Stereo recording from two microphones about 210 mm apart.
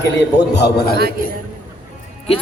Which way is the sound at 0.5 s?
50° left (ahead or behind).